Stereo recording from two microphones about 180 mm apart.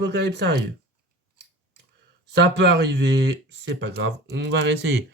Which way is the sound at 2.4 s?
75° right (ahead or behind).